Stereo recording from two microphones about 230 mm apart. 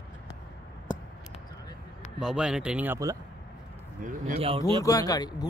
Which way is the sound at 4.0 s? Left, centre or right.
Right.